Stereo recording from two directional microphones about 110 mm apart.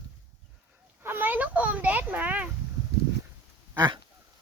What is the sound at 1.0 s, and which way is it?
Speech, 20° right (ahead or behind).